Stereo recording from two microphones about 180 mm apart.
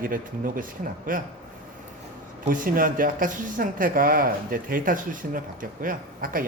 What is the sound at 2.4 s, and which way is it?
Speech, 50° right (ahead or behind).